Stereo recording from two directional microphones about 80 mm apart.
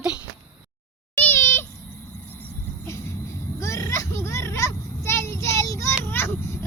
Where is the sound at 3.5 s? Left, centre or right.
Left.